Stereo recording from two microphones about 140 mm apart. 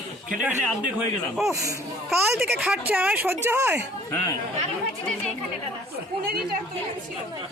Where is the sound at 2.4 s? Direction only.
10° right (ahead or behind).